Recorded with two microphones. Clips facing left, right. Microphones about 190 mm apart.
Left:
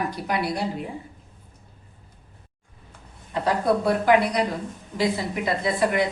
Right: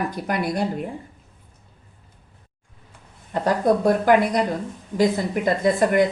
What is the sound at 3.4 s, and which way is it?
Speech, 45° right (ahead or behind).